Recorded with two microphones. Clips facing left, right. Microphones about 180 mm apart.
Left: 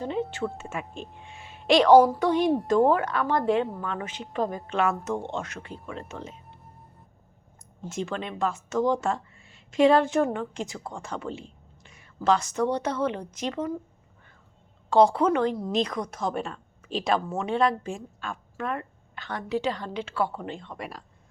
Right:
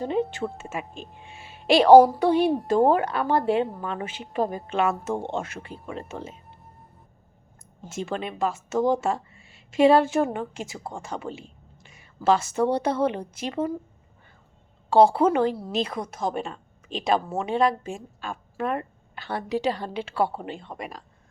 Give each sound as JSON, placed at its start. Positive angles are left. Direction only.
{"t": 0.0, "sound": "a woman's voice", "side_deg": -15}
{"t": 2.7, "sound": "a woman's voice", "side_deg": -20}
{"t": 4.7, "sound": "a woman's voice", "side_deg": -5}
{"t": 8.1, "sound": "a woman's voice", "side_deg": -10}
{"t": 13.5, "sound": "speech", "side_deg": -30}
{"t": 14.8, "sound": "a woman's voice", "side_deg": -5}